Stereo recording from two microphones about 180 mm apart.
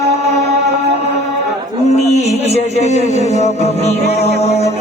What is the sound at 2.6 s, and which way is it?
Music, 40° left (ahead or behind).